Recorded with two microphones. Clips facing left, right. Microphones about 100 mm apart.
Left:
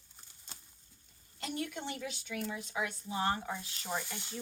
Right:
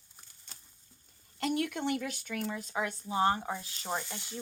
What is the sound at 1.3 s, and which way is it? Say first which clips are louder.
Speech: right 7 dB; 65° right (ahead or behind).